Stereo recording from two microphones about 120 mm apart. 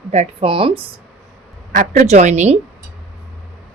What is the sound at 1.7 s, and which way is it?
Speech, 80° right.